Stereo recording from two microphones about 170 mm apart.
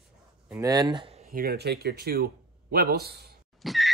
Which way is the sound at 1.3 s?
65° right (ahead or behind).